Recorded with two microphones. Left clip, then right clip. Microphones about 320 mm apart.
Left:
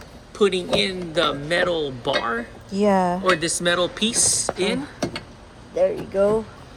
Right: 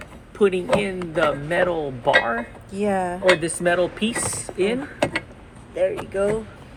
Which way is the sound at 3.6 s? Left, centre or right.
Centre.